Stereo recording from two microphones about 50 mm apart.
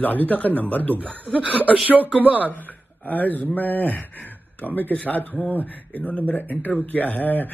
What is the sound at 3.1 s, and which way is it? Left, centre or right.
Speech, left.